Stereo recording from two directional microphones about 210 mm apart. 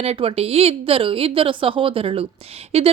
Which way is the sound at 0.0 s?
30° right (ahead or behind).